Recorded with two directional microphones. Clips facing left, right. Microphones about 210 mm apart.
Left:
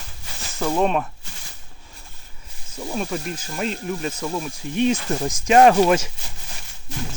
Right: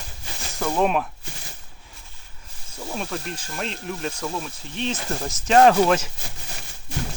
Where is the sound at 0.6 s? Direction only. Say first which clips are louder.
Left 1 dB; centre (ahead or behind).